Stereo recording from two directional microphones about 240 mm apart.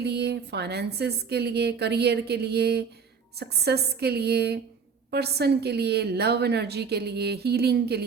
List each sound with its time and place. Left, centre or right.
0.0 s a woman's voice: right